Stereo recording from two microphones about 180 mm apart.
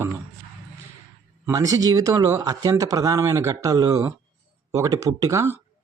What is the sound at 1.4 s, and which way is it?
Speech, 20° right (ahead or behind).